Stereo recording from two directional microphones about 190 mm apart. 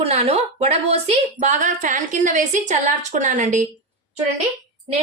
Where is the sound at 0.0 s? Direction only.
35° right (ahead or behind).